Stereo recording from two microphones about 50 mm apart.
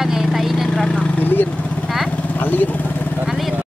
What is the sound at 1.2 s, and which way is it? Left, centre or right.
Speech, left.